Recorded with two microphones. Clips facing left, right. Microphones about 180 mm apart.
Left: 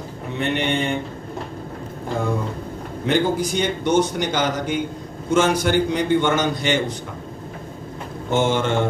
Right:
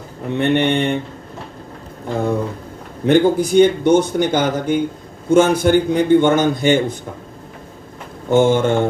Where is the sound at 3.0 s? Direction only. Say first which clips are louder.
Right 7 dB; 55° right (ahead or behind).